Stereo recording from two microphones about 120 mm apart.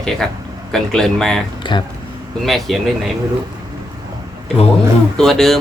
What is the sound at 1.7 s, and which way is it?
Speech, 40° left (ahead or behind).